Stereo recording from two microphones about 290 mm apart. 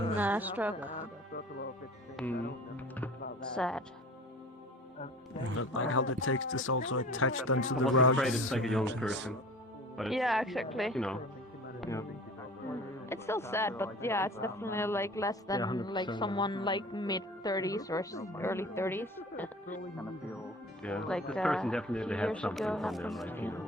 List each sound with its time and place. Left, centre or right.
0.2 s speech: centre
2.1 s speech: centre
3.5 s speech: centre
5.5 s speech: left
8.2 s speech: centre
13.1 s a woman's voice: centre